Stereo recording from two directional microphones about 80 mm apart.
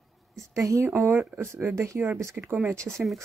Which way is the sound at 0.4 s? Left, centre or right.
Right.